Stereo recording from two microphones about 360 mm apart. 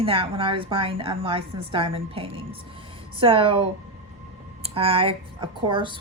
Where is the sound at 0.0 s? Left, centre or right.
Centre.